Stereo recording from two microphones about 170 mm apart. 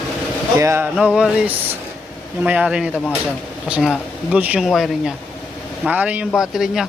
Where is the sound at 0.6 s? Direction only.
15° right (ahead or behind).